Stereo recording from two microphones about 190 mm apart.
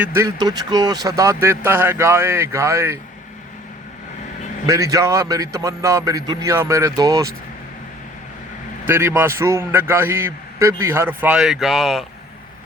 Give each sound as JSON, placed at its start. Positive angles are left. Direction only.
{"t": 0.0, "sound": "a man's voice", "side_deg": -15}
{"t": 4.6, "sound": "a man's voice", "side_deg": -15}
{"t": 8.9, "sound": "a man's voice", "side_deg": -10}